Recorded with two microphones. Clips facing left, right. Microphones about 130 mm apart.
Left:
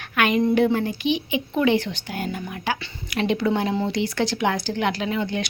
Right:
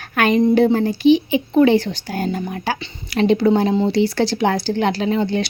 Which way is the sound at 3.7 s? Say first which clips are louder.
Right 6 dB; 20° right (ahead or behind).